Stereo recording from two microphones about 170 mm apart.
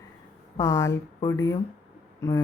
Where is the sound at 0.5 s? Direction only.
20° left (ahead or behind).